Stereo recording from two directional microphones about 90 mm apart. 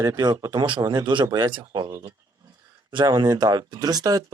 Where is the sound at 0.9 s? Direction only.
55° right (ahead or behind).